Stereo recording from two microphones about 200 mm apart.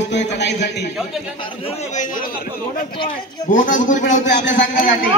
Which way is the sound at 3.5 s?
40° left (ahead or behind).